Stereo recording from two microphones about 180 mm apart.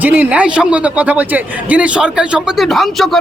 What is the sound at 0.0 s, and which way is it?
A man's voice, 10° right (ahead or behind).